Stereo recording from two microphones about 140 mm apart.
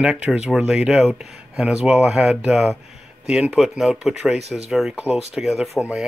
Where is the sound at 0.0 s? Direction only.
5° right (ahead or behind).